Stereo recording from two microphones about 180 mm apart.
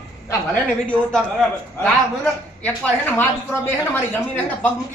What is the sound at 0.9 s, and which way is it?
A man's voice, 5° left (ahead or behind).